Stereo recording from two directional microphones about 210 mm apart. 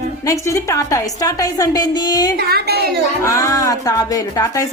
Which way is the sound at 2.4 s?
45° right (ahead or behind).